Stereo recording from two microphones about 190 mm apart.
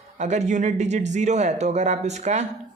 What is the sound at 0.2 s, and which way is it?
Speech, 40° right (ahead or behind).